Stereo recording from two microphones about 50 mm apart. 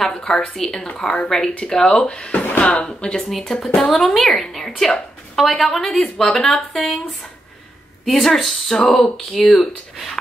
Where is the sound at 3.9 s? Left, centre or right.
Centre.